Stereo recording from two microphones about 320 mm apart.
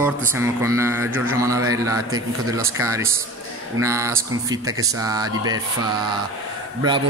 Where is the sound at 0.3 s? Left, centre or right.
Centre.